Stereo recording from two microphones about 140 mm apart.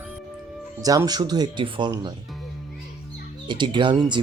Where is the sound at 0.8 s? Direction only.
25° right (ahead or behind).